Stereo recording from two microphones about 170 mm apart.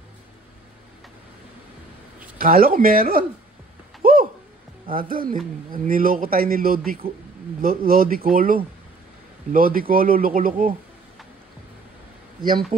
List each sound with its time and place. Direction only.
2.3 s a man's voice: 60° right (ahead or behind)
4.0 s a sound: 60° right (ahead or behind)
4.8 s a man's voice: 55° right (ahead or behind)